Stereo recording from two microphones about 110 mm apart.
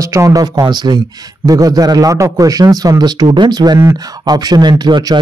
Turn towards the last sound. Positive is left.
turn(degrees=-35)  # may be behind; listen again after turning